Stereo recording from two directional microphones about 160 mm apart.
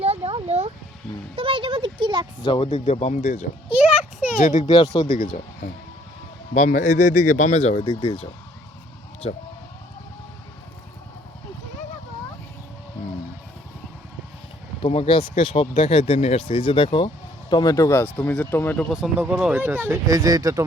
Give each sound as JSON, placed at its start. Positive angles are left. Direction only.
{"t": 0.0, "sound": "a sound", "side_deg": -40}
{"t": 2.4, "sound": "speech", "side_deg": 30}
{"t": 4.4, "sound": "speech", "side_deg": 55}
{"t": 4.8, "sound": "speech", "side_deg": 25}
{"t": 6.5, "sound": "speech", "side_deg": 50}
{"t": 14.8, "sound": "speech", "side_deg": 35}
{"t": 18.9, "sound": "speech", "side_deg": -5}